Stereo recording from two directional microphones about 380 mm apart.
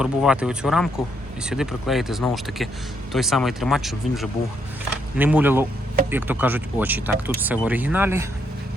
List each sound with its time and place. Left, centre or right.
0.0 s speech: centre